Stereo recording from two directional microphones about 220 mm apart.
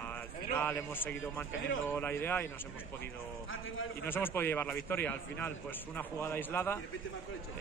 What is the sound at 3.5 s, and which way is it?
Speech, 65° left (ahead or behind).